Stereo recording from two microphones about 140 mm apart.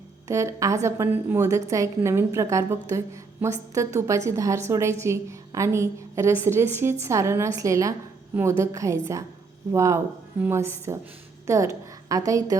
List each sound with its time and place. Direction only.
0.3 s a woman's voice: 20° right (ahead or behind)